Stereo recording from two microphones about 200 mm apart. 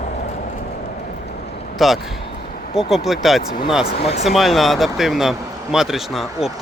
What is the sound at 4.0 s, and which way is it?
Speech, 30° left (ahead or behind).